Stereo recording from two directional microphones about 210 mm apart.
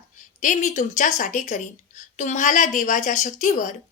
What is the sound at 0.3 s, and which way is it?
A woman's voice, 35° left (ahead or behind).